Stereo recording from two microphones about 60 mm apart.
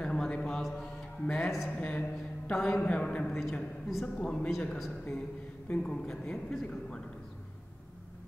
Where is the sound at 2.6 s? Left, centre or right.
Centre.